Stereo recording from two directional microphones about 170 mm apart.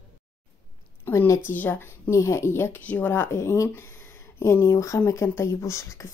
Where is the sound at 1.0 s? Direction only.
15° left (ahead or behind).